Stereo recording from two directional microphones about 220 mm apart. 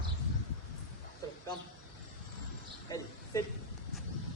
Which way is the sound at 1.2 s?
15° left (ahead or behind).